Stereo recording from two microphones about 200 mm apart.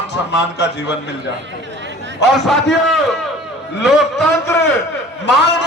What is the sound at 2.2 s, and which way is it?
Speech, 60° left (ahead or behind).